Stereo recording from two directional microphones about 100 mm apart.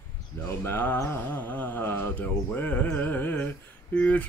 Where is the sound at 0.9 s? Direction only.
20° left (ahead or behind).